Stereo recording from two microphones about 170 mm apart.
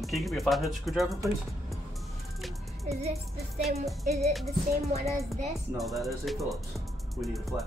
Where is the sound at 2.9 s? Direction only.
40° right (ahead or behind).